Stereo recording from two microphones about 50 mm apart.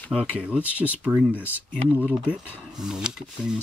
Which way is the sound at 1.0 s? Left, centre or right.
Centre.